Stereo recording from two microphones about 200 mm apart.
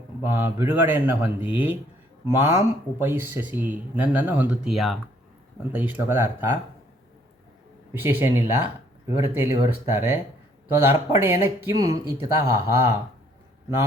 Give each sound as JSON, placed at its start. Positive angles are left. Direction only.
{"t": 0.2, "sound": "speech", "side_deg": -10}
{"t": 8.0, "sound": "speech", "side_deg": -10}